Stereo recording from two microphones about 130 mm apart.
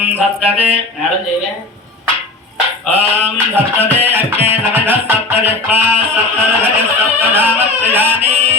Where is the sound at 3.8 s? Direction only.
15° right (ahead or behind).